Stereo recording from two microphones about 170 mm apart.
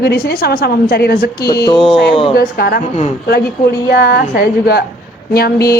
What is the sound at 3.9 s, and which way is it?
A woman's voice, 75° left (ahead or behind).